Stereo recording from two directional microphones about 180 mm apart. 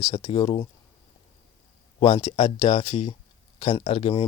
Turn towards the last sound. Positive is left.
turn(degrees=30)  # may be behind; listen again after turning